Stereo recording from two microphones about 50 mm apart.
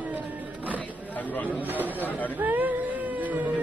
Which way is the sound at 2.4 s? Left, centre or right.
Right.